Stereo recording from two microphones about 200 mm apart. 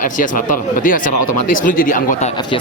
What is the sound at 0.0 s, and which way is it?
Speech, 40° left (ahead or behind).